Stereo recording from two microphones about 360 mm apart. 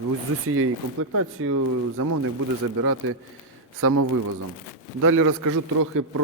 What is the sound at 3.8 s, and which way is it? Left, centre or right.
Speech, right.